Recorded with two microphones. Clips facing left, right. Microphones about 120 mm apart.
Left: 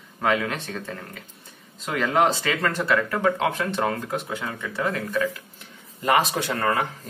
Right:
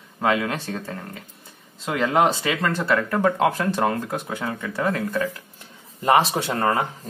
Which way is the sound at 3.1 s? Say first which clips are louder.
Right 3 dB; 35° right (ahead or behind).